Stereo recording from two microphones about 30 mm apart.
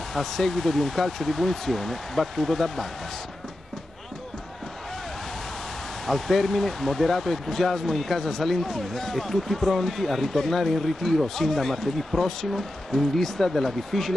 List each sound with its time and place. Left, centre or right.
0.1 s speech: centre
6.0 s speech: centre